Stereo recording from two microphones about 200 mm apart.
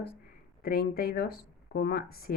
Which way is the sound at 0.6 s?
50° left (ahead or behind).